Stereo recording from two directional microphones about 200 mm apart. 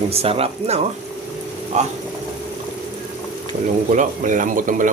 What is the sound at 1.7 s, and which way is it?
Speech, 35° right (ahead or behind).